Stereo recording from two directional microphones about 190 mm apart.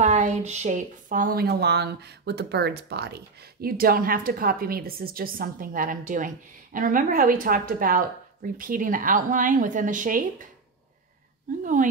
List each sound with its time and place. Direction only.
0.0 s a woman's voice: 40° right (ahead or behind)
11.6 s a woman's voice: 45° right (ahead or behind)